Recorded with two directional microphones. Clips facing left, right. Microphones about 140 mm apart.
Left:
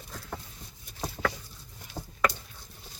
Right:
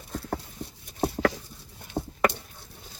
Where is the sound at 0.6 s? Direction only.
65° right (ahead or behind).